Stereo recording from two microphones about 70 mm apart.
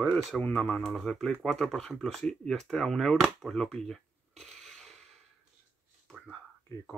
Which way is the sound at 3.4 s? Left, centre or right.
Centre.